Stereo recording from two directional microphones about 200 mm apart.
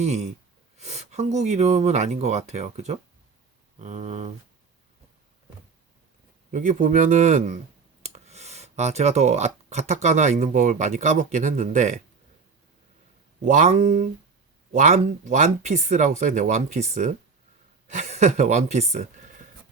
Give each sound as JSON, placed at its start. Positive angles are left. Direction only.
{"t": 0.0, "sound": "speech", "side_deg": -35}
{"t": 6.5, "sound": "speech", "side_deg": -40}
{"t": 13.4, "sound": "speech", "side_deg": -40}